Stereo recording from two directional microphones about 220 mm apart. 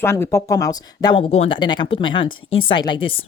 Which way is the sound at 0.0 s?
10° left (ahead or behind).